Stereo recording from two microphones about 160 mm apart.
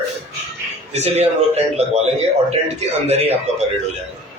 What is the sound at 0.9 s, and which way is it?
A man's voice, 45° right (ahead or behind).